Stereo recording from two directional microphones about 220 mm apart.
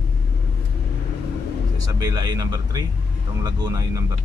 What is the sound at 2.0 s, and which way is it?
Speech, 20° right (ahead or behind).